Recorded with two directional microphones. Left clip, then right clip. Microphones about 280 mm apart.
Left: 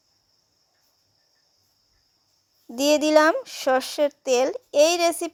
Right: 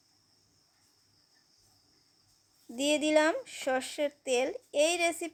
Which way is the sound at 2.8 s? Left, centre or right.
Left.